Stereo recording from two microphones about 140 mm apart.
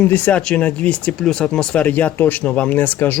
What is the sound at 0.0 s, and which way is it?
Speech, 10° left (ahead or behind).